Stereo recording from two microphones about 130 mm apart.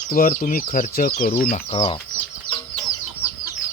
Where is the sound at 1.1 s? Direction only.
55° left (ahead or behind).